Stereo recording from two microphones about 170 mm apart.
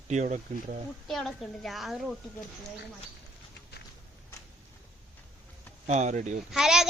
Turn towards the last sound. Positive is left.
turn(degrees=-5)  # may be behind; listen again after turning